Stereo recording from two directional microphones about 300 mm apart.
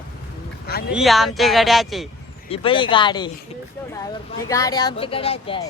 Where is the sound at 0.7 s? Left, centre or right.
Left.